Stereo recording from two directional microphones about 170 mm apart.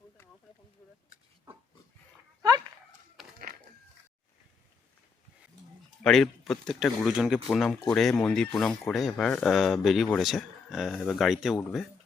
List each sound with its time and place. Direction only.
6.0 s speech: centre (ahead or behind)